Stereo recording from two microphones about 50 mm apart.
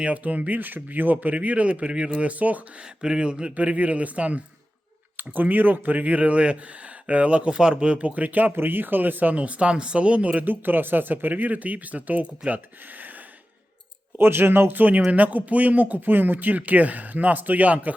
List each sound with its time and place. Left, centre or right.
0.0 s speech: right
3.0 s speech: centre; by 8.5 s right
8.5 s speech: right
10.4 s speech: right
14.2 s speech: right